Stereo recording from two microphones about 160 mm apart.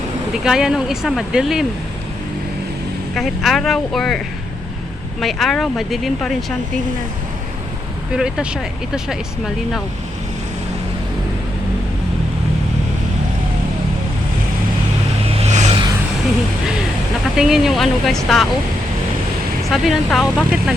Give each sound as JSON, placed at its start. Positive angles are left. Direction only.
{"t": 0.4, "sound": "speech", "side_deg": -5}
{"t": 3.2, "sound": "speech", "side_deg": 0}
{"t": 5.2, "sound": "speech", "side_deg": 0}
{"t": 8.1, "sound": "speech", "side_deg": -5}
{"t": 15.4, "sound": "vehicle", "side_deg": -45}
{"t": 17.3, "sound": "speech", "side_deg": -5}
{"t": 19.7, "sound": "speech", "side_deg": 0}